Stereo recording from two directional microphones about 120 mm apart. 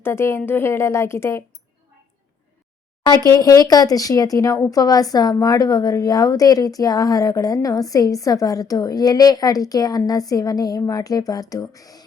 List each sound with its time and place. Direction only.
0.0 s a woman's voice: 20° left (ahead or behind)
3.0 s speech: 35° left (ahead or behind)